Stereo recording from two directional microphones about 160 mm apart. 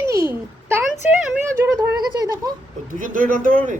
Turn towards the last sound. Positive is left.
turn(degrees=-60)  # may be behind; listen again after turning